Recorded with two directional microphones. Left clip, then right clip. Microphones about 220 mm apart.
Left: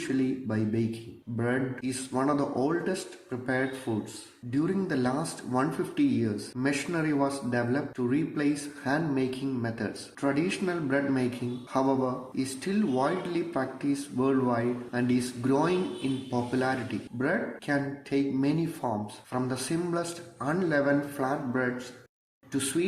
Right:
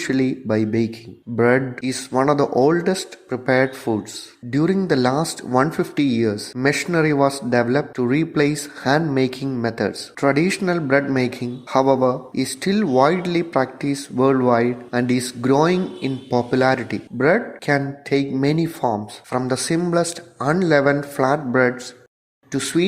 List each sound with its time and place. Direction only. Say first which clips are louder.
0.1 s speech: right 10 dB; 35° right (ahead or behind)